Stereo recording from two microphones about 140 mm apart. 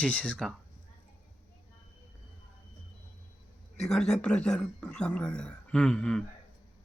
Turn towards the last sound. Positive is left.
turn(degrees=5)  # may be behind; listen again after turning